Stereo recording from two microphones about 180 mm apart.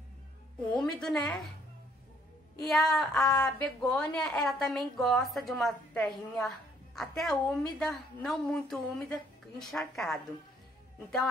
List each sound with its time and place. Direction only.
0.7 s a woman's voice: 5° left (ahead or behind)
2.6 s a woman's voice: centre (ahead or behind)